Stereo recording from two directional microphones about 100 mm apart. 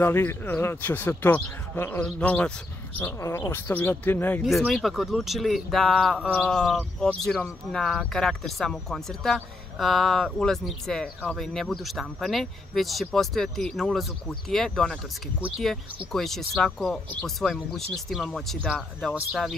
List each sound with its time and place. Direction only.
0.0 s speech: 20° left (ahead or behind)
3.0 s speech: 30° left (ahead or behind)
4.4 s speech: centre (ahead or behind)
16.1 s speech: 5° left (ahead or behind)